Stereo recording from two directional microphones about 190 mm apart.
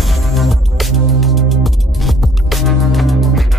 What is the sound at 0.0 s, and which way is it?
Music, centre (ahead or behind).